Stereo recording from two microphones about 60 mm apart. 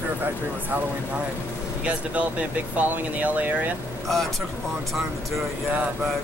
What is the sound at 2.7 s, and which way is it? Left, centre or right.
Speech, right.